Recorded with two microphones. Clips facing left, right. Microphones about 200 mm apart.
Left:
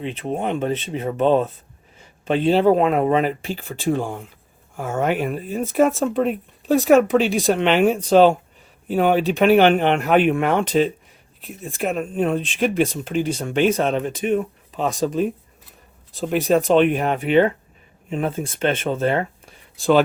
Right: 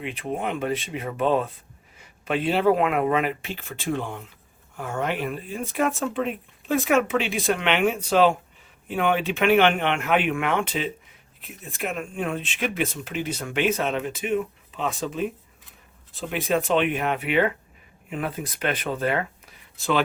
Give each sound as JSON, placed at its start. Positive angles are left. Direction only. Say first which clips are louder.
{"t": 0.2, "sound": "speech", "louder": "left 4 dB", "side_deg": 30}
{"t": 2.0, "sound": "a sound", "louder": "left 5 dB", "side_deg": 30}
{"t": 2.5, "sound": "speech", "louder": "left 5 dB", "side_deg": 30}
{"t": 16.3, "sound": "speech", "louder": "left 6 dB", "side_deg": 40}